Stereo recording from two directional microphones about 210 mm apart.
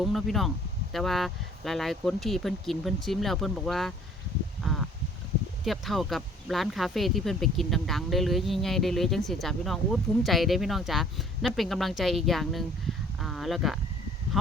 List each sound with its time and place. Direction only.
0.0 s speech: centre (ahead or behind)
5.6 s speech: centre (ahead or behind)